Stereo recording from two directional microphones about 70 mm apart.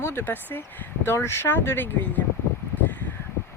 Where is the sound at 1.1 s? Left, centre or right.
Left.